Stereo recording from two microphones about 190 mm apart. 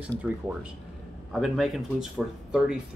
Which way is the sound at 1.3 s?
Centre (ahead or behind).